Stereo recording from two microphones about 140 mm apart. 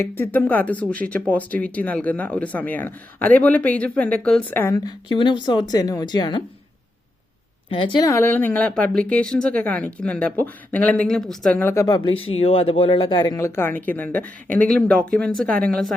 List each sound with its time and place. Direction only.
0.2 s speech: 10° left (ahead or behind)
4.7 s speech: 30° left (ahead or behind)
7.7 s speech: 35° left (ahead or behind)
8.0 s speech: 20° left (ahead or behind)
13.6 s speech: 15° left (ahead or behind)